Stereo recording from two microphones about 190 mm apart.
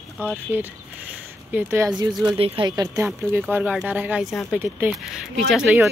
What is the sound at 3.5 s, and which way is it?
A woman's voice, 5° right (ahead or behind).